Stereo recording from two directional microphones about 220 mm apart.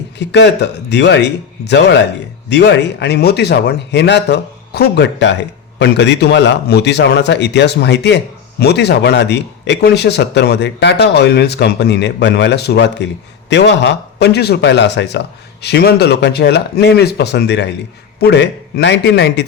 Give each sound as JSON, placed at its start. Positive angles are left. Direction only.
{"t": 0.2, "sound": "a man's voice", "side_deg": 50}